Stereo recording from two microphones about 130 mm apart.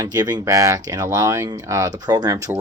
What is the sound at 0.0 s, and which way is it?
Speech, 30° right (ahead or behind).